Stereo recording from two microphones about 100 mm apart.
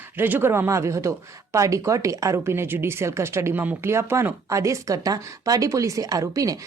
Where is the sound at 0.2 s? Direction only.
20° right (ahead or behind).